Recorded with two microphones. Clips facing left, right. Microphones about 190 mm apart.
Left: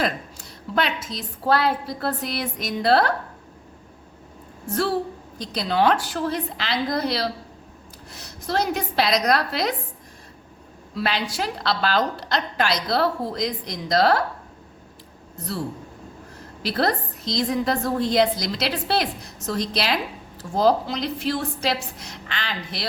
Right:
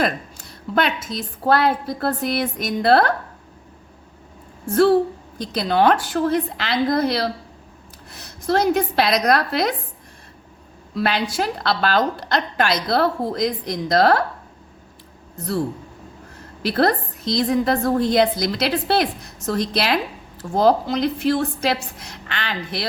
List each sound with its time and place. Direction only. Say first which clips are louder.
0.8 s a woman's voice: right 3 dB; 50° right (ahead or behind)
5.4 s a woman's voice: right 3 dB; 55° right (ahead or behind)
10.9 s a woman's voice: right 4 dB; 50° right (ahead or behind)
16.6 s a woman's voice: right 4 dB; 55° right (ahead or behind)